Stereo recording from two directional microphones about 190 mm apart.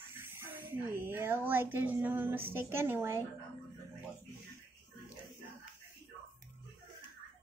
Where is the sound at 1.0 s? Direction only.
10° right (ahead or behind).